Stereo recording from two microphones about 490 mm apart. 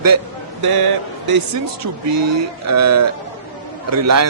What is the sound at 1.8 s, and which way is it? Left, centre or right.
A man's voice, right.